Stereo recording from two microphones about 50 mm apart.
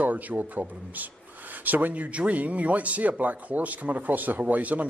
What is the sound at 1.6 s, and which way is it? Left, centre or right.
A man's voice, right.